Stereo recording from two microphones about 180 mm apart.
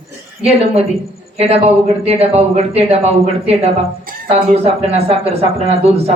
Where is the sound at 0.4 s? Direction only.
35° right (ahead or behind).